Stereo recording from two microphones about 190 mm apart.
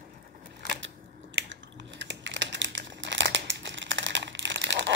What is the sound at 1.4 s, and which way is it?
Crumpling, 70° right (ahead or behind).